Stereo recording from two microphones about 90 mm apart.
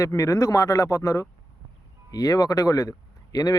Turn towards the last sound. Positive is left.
turn(degrees=45)  # may be behind; listen again after turning